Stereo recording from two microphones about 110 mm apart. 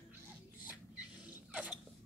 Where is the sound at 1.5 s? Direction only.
10° right (ahead or behind).